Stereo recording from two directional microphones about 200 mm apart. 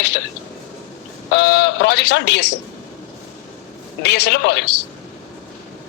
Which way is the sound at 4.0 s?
55° left (ahead or behind).